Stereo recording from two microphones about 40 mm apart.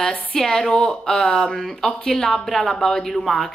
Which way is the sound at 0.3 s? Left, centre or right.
Centre.